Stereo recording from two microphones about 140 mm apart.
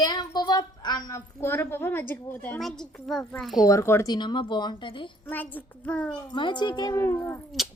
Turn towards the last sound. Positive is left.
turn(degrees=0)  # may be behind; listen again after turning